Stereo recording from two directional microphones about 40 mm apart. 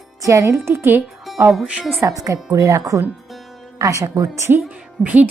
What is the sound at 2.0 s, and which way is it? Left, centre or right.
Speech, right.